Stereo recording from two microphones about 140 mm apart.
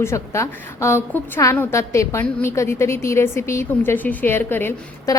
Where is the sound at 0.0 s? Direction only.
20° left (ahead or behind).